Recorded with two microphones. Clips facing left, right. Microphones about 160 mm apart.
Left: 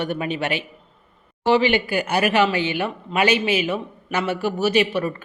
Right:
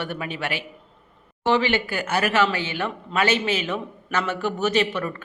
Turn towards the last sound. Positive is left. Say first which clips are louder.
# left 3 dB
turn(degrees=15)  # may be behind; listen again after turning